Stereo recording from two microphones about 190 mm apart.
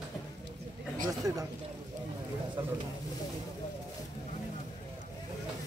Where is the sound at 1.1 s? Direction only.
20° right (ahead or behind).